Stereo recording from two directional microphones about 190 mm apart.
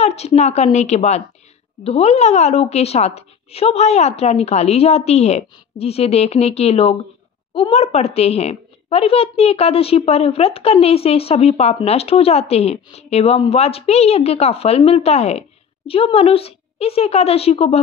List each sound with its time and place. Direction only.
0.0 s a woman's voice: 35° left (ahead or behind)